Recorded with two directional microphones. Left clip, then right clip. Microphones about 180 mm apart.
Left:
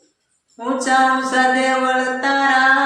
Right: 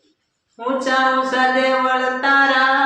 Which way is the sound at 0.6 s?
Centre (ahead or behind).